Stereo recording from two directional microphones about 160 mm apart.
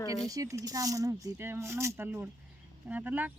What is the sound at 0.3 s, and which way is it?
Speech, 20° right (ahead or behind).